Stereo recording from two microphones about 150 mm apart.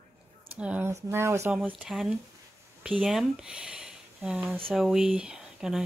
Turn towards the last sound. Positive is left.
turn(degrees=-5)  # may be behind; listen again after turning